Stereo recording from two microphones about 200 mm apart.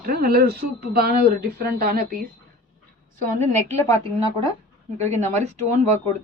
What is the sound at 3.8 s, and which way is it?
Speech, 15° left (ahead or behind).